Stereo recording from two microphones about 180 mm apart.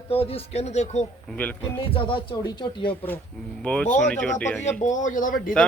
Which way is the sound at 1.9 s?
25° left (ahead or behind).